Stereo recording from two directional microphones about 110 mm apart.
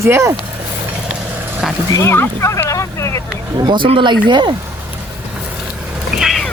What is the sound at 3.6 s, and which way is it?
Speech, 45° right (ahead or behind).